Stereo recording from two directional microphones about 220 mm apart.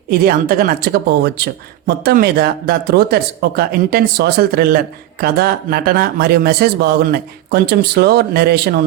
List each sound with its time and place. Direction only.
0.1 s speech: 40° right (ahead or behind)